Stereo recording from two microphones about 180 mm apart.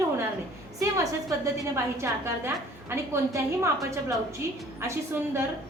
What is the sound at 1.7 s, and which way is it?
A woman's voice, 15° right (ahead or behind).